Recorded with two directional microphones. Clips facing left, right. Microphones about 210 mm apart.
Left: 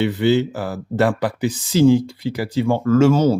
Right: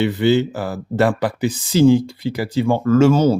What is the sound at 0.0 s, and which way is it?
Speech, 25° right (ahead or behind).